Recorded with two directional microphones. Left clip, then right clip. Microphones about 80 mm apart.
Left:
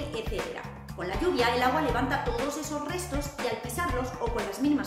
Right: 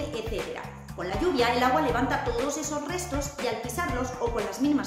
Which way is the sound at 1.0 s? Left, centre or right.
Right.